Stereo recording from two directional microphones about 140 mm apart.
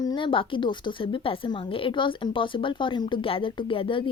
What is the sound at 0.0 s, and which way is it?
A woman's voice, 30° left (ahead or behind).